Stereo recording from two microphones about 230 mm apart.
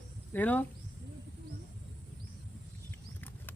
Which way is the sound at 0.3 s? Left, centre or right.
Centre.